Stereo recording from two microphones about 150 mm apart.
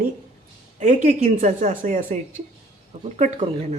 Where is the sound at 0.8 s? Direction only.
55° right (ahead or behind).